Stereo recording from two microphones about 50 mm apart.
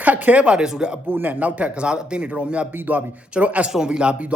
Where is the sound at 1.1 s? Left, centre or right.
Right.